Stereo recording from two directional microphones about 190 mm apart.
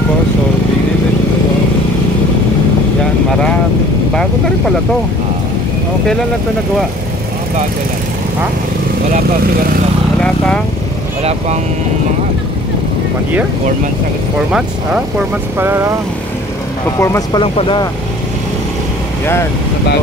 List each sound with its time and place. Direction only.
10.2 s speech: 5° left (ahead or behind)
11.2 s speech: 35° right (ahead or behind)
15.1 s speech: 10° right (ahead or behind)
17.0 s speech: 15° left (ahead or behind)
17.4 s speech: 25° left (ahead or behind)